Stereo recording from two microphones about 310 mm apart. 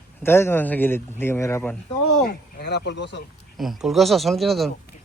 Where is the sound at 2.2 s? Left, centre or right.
Left.